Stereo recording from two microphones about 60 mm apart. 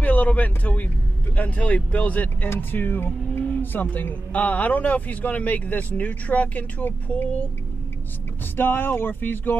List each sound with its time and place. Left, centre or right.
0.0 s speech: left
3.4 s a sound: left
3.9 s speech: left
8.5 s speech: left